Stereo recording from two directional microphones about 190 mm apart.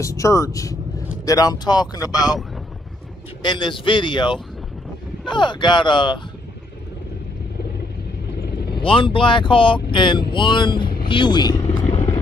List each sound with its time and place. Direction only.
0.0 s speech: 15° left (ahead or behind)
3.4 s speech: 25° left (ahead or behind)
8.8 s speech: 25° left (ahead or behind)